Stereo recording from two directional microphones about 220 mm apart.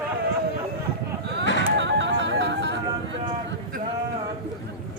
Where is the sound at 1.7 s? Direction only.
55° right (ahead or behind).